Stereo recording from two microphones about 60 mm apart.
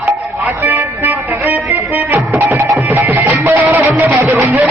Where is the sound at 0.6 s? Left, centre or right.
Right.